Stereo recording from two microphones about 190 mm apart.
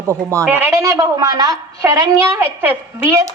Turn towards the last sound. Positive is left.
turn(degrees=-15)  # may be behind; listen again after turning